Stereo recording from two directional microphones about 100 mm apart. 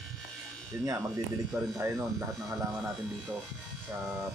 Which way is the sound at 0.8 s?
35° right (ahead or behind).